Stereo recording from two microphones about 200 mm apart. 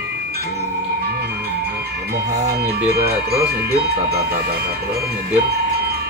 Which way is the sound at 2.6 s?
50° right (ahead or behind).